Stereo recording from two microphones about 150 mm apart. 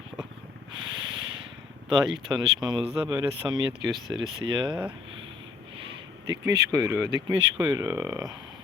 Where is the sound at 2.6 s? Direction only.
30° right (ahead or behind).